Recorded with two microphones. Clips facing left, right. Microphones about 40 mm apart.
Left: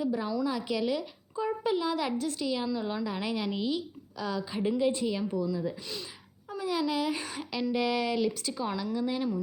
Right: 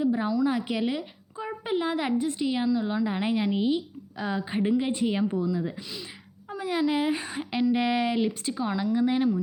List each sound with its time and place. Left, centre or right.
0.0 s a woman's voice: right
3.1 s a woman's voice: right
6.5 s a woman's voice: right